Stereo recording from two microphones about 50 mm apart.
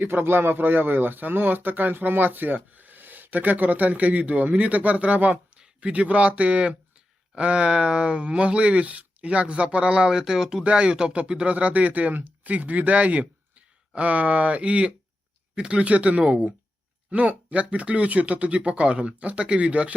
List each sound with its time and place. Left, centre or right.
0.0 s speech: right
5.5 s a sound: centre
5.9 s speech: right